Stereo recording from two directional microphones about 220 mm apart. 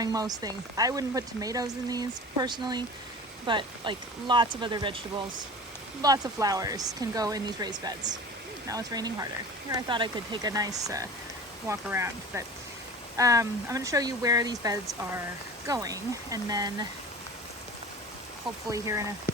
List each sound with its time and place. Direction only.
0.0 s speech: 15° right (ahead or behind)
18.7 s speech: 15° right (ahead or behind)